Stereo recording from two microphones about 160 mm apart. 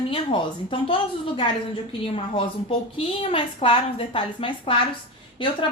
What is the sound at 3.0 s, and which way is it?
Speech, 35° left (ahead or behind).